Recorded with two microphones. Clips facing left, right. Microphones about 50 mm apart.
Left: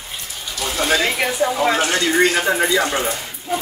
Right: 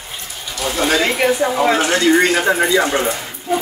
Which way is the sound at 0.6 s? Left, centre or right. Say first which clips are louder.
Right 2 dB; centre.